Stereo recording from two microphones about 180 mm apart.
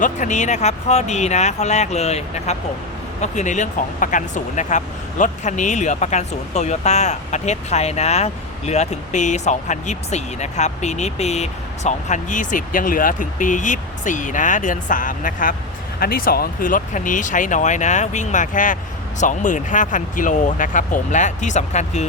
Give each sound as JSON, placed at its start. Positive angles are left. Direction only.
{"t": 0.0, "sound": "speech", "side_deg": 45}